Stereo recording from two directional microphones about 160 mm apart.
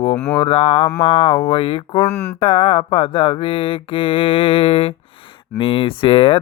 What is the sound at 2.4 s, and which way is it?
Speech, 35° left (ahead or behind).